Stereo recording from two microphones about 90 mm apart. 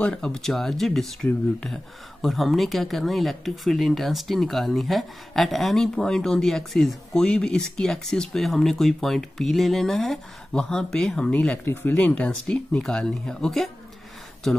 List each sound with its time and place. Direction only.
0.0 s speech: 10° left (ahead or behind)
2.2 s speech: centre (ahead or behind); by 12.3 s 20° left (ahead or behind)
12.4 s speech: 5° left (ahead or behind)